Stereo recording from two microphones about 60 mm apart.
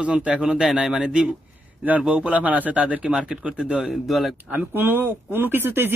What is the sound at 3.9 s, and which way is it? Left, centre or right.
Speech, centre.